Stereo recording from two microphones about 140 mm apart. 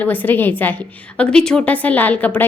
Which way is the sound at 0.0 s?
15° left (ahead or behind).